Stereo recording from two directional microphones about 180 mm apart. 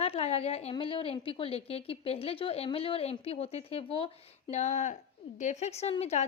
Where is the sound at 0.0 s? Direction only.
35° left (ahead or behind).